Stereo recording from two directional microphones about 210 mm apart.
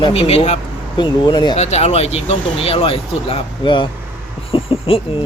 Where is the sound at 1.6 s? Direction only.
30° left (ahead or behind).